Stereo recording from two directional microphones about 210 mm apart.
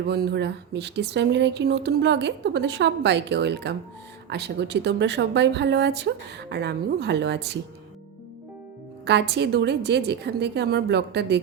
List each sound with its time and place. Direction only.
0.0 s a woman's voice: 50° right (ahead or behind)
9.0 s speech: 55° right (ahead or behind)